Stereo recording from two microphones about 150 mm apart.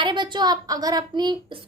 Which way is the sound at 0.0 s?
30° right (ahead or behind).